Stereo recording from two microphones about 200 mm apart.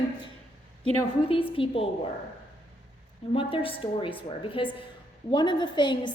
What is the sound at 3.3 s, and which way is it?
A woman's voice, 25° left (ahead or behind).